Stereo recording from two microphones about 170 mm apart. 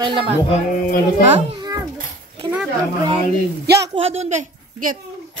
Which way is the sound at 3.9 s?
35° right (ahead or behind).